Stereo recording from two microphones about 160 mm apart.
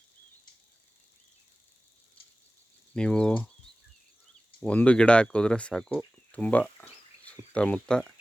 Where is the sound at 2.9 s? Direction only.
5° left (ahead or behind).